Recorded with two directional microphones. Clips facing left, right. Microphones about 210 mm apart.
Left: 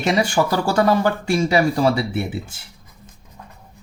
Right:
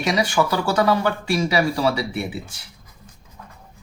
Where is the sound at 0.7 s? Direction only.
45° left (ahead or behind).